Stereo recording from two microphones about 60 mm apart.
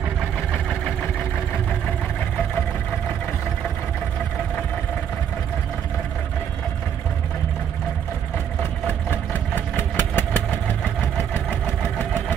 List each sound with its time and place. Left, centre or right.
9.3 s vehicle: left